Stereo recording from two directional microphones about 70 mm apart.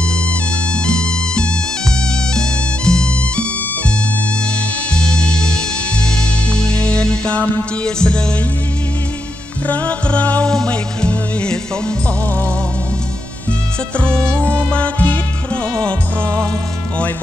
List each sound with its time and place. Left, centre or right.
0.8 s music: centre
4.9 s music: centre
9.7 s music: centre
13.9 s music: centre